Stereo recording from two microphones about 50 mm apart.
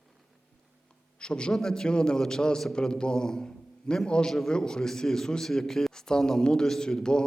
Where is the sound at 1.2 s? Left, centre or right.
Centre.